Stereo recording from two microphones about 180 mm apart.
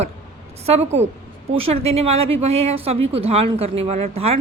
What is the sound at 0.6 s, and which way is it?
A woman's voice, 35° right (ahead or behind).